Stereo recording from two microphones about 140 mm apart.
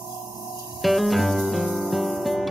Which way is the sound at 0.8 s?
Centre (ahead or behind).